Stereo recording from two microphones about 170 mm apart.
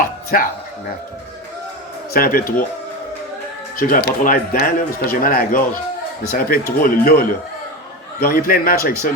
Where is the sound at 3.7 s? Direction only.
55° left (ahead or behind).